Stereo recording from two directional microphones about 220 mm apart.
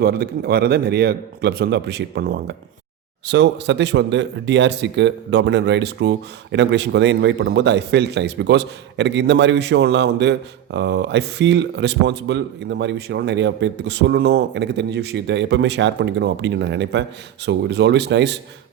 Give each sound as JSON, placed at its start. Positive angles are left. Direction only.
{"t": 0.0, "sound": "speech", "side_deg": -45}